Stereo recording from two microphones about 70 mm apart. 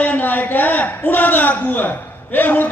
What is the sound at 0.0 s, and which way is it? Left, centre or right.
A man's voice, left.